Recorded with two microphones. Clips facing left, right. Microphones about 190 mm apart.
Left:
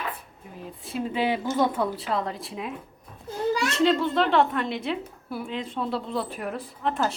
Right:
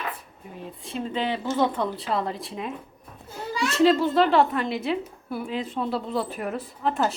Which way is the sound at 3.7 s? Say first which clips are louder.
Right 5 dB; 5° right (ahead or behind).